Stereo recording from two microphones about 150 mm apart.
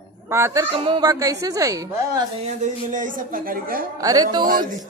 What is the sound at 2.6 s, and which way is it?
A woman's voice, 60° right (ahead or behind).